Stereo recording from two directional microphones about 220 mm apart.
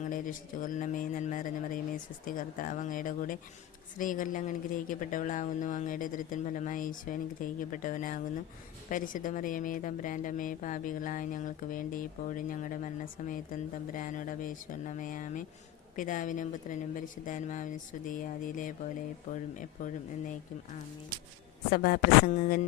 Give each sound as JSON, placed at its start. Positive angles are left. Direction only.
{"t": 0.1, "sound": "speech", "side_deg": 40}
{"t": 21.7, "sound": "speech", "side_deg": 40}